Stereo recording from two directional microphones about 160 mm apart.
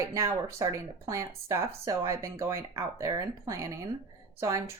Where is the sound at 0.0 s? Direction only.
20° right (ahead or behind).